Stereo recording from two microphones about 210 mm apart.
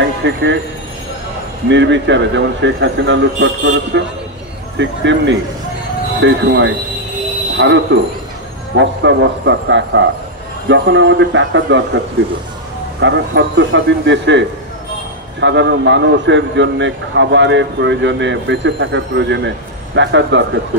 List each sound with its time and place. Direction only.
0.0 s speech: 60° right (ahead or behind)
1.7 s a man's voice: 60° right (ahead or behind)
13.0 s a man's voice: 60° right (ahead or behind)
15.4 s a man's voice: 60° right (ahead or behind)